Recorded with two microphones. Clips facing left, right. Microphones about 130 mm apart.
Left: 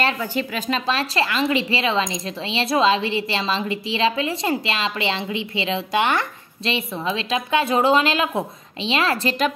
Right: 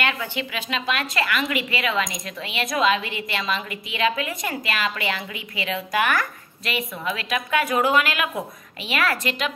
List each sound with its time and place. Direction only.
0.0 s a woman's voice: 40° left (ahead or behind)